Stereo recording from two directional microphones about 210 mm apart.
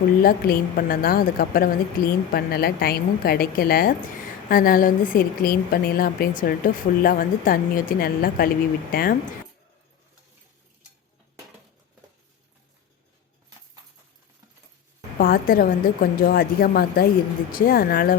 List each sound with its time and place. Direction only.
0.2 s a woman's voice: 45° left (ahead or behind)
15.2 s a woman's voice: 45° left (ahead or behind)